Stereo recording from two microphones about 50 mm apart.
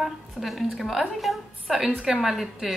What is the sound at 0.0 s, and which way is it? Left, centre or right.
A woman's voice, centre.